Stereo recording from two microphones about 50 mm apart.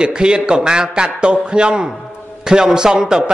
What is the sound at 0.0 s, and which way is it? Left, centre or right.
Speech, centre.